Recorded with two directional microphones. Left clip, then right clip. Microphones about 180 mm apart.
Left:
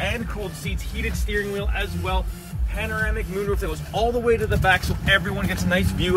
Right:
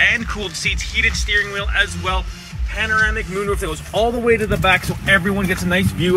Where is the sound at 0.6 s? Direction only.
15° left (ahead or behind).